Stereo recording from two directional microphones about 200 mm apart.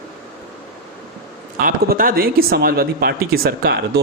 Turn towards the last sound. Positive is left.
turn(degrees=-50)  # may be behind; listen again after turning